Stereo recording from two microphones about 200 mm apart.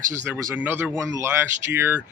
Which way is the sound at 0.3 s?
15° right (ahead or behind).